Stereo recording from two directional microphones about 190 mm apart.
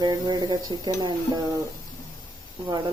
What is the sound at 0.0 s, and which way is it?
Speech, 20° right (ahead or behind).